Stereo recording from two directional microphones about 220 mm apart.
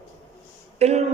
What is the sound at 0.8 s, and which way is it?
Speech, 30° right (ahead or behind).